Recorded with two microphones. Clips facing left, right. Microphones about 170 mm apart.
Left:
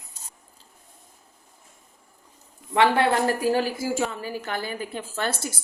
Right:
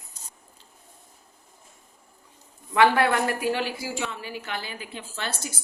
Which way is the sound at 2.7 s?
30° left (ahead or behind).